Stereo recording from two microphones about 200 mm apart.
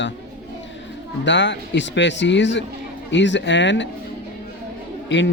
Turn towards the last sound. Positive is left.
turn(degrees=65)  # may be behind; listen again after turning